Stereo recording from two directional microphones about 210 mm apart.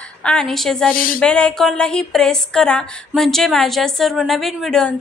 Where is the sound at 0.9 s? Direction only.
40° left (ahead or behind).